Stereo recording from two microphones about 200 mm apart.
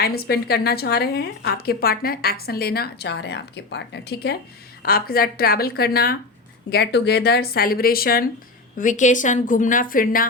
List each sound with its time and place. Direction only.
0.0 s a woman's voice: 50° left (ahead or behind)